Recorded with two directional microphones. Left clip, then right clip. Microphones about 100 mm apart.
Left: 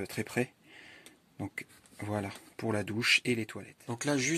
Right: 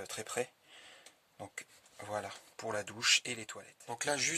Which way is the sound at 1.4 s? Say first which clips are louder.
Left 6 dB; 15° right (ahead or behind).